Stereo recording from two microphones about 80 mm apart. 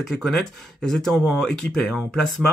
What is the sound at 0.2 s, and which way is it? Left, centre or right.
Speech, centre.